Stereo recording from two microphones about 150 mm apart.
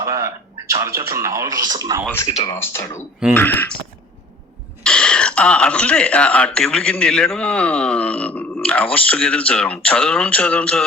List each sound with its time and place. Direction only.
0.0 s a sound: 20° right (ahead or behind)
0.7 s speech: 20° right (ahead or behind)
2.2 s speech: 30° left (ahead or behind)
2.6 s speech: 15° left (ahead or behind)
4.8 s speech: 5° left (ahead or behind)